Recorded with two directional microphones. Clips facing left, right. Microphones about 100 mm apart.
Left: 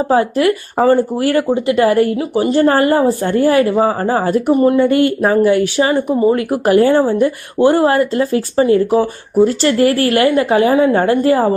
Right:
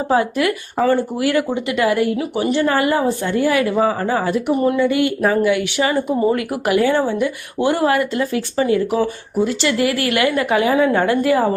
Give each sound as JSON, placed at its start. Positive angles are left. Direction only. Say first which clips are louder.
{"t": 0.1, "sound": "speech", "louder": "left 3 dB", "side_deg": 35}
{"t": 5.2, "sound": "speech", "louder": "left 4 dB", "side_deg": 30}